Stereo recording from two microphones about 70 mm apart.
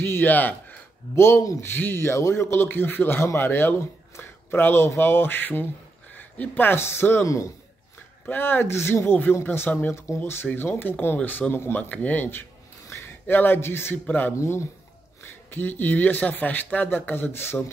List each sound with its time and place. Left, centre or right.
0.0 s speech: left
1.1 s a man's voice: left
1.7 s a man's voice: left
8.3 s a man's voice: left
9.9 s a man's voice: left
14.4 s a man's voice: left
15.5 s speech: left